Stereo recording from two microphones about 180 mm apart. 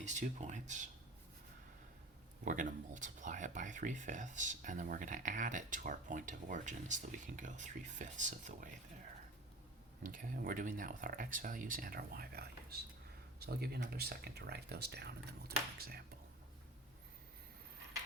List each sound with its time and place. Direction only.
0.0 s speech: 40° right (ahead or behind)
2.4 s speech: 45° right (ahead or behind)
10.0 s speech: 50° right (ahead or behind)